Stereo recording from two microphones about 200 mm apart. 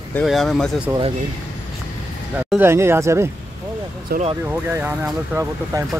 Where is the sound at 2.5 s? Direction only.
10° right (ahead or behind).